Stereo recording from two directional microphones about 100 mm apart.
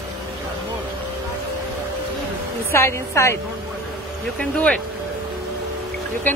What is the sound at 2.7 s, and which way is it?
Speech, 25° left (ahead or behind).